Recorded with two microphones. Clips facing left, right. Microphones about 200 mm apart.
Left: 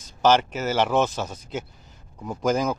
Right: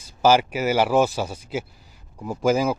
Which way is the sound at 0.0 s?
10° right (ahead or behind).